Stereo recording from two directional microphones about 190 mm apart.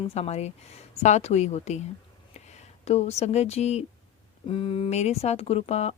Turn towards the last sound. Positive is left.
turn(degrees=35)  # may be behind; listen again after turning